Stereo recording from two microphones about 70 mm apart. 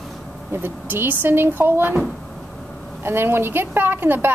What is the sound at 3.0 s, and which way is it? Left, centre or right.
Speech, right.